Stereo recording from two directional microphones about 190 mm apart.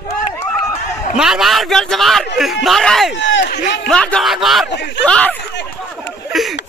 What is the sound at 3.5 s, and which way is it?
Speech, 55° left (ahead or behind).